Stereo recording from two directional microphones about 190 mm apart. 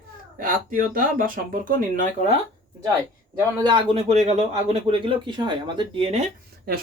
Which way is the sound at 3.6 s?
25° right (ahead or behind).